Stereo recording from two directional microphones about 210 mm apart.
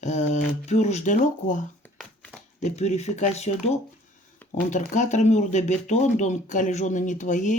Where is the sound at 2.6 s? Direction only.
30° left (ahead or behind).